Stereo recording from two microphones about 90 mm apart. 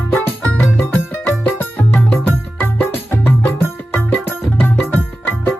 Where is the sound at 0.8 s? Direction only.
20° left (ahead or behind).